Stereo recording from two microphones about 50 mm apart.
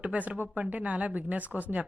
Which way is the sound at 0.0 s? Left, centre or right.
Right.